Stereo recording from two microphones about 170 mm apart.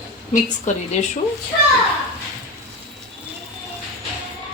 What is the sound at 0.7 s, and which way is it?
Speech, 45° left (ahead or behind).